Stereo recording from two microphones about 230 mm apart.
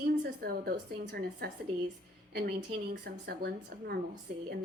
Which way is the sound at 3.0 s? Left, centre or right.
Right.